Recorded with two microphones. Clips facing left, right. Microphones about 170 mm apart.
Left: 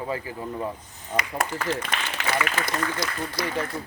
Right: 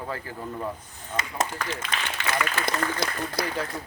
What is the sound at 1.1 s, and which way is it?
Speech, 35° left (ahead or behind).